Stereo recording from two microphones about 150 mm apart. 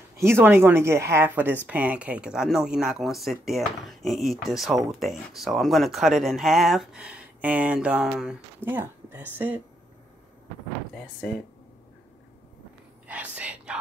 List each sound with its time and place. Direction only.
0.2 s speech: 15° right (ahead or behind)
13.0 s speech: 10° right (ahead or behind)